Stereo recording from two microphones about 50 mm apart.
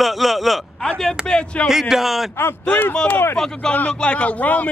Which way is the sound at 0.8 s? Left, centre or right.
Centre.